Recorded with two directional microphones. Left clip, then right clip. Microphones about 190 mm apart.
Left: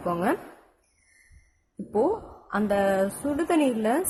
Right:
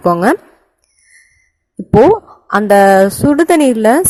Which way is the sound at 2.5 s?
45° right (ahead or behind).